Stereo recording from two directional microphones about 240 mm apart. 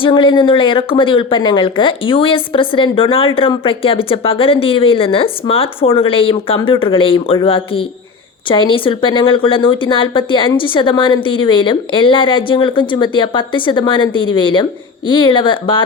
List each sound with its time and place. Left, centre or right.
0.0 s speech: centre